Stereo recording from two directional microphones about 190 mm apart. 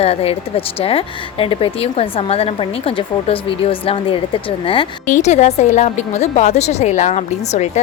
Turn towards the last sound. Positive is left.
turn(degrees=35)  # may be behind; listen again after turning